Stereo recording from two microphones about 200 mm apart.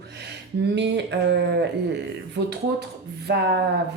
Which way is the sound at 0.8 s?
60° right (ahead or behind).